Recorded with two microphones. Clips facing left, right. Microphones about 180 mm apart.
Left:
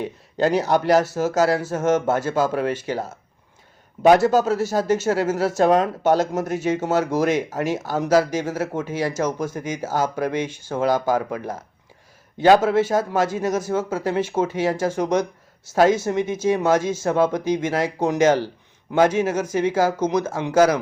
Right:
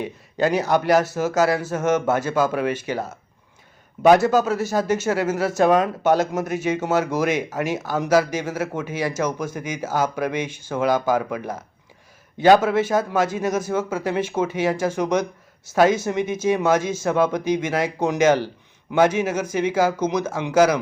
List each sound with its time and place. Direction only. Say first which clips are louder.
0.0 s speech: left 1 dB; 10° right (ahead or behind)
4.2 s speech: left 1 dB; 15° right (ahead or behind)